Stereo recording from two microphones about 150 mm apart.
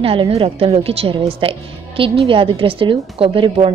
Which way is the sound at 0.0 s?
40° right (ahead or behind).